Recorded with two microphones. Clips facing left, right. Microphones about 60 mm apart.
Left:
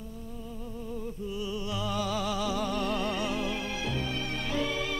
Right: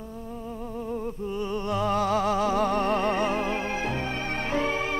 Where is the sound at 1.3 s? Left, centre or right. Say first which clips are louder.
Right 6 dB; right.